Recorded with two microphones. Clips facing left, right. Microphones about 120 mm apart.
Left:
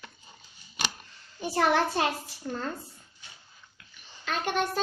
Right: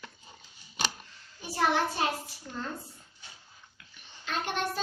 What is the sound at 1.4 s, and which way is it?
Speech, 65° left (ahead or behind).